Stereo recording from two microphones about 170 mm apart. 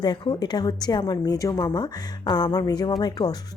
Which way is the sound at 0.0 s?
25° left (ahead or behind).